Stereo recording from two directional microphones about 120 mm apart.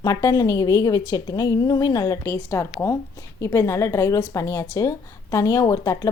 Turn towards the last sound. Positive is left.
turn(degrees=25)  # may be behind; listen again after turning